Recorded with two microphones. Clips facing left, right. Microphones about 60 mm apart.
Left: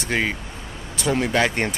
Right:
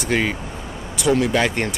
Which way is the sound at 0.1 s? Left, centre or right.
Centre.